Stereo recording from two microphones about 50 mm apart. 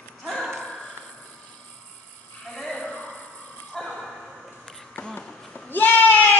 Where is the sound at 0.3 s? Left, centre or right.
Centre.